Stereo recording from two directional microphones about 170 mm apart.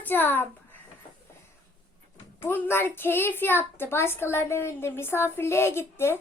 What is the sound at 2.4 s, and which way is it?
A woman's voice, 10° left (ahead or behind).